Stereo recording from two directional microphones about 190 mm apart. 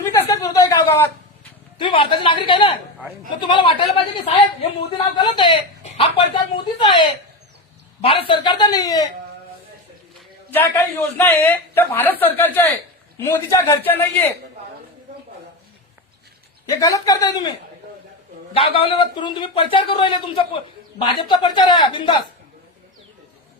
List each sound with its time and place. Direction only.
0.0 s a sound: 15° left (ahead or behind)
1.8 s speech: 25° left (ahead or behind)
10.5 s a woman's voice: 10° left (ahead or behind)
16.6 s speech: 20° left (ahead or behind)
18.5 s speech: 30° left (ahead or behind)